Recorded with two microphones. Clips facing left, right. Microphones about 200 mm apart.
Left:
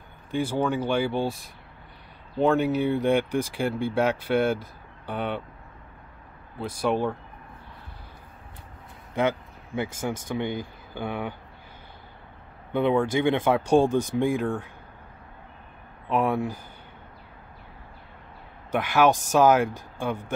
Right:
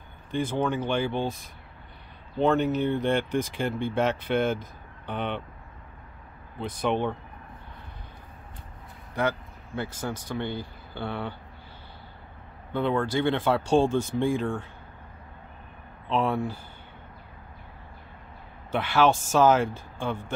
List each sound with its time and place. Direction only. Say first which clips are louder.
0.3 s speech: left 1 dB; 10° left (ahead or behind)
2.3 s speech: left 1 dB; 10° left (ahead or behind)
6.6 s speech: left 1 dB; 10° left (ahead or behind)
9.1 s a sound: left 3 dB; 20° left (ahead or behind)
10.2 s speech: left 3 dB; 15° left (ahead or behind)
12.7 s speech: left 3 dB; 20° left (ahead or behind)
16.1 s speech: left 2 dB; 15° left (ahead or behind)
18.7 s speech: left 1 dB; 15° left (ahead or behind)